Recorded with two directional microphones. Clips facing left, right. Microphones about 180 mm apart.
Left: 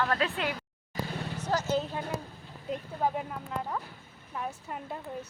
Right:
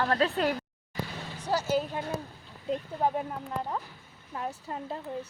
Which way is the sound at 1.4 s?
10° right (ahead or behind).